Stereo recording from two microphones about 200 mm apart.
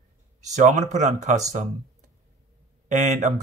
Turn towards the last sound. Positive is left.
turn(degrees=-35)  # may be behind; listen again after turning